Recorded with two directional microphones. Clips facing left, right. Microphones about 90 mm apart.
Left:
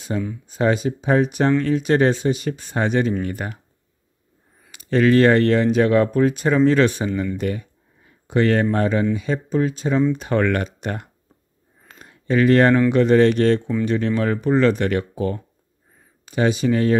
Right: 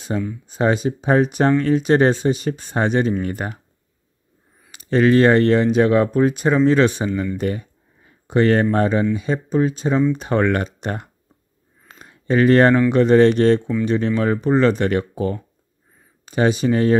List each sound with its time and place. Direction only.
0.1 s speech: 15° right (ahead or behind)
0.5 s speech: 25° right (ahead or behind)
4.6 s speech: 30° right (ahead or behind)
7.3 s speech: 35° right (ahead or behind)
11.9 s a sound: 25° right (ahead or behind)
12.9 s speech: 30° right (ahead or behind)